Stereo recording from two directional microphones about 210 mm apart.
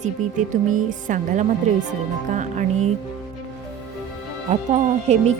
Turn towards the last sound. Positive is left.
turn(degrees=-30)  # may be behind; listen again after turning